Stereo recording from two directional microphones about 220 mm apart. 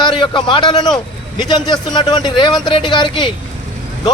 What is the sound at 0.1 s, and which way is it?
Speech, 20° left (ahead or behind).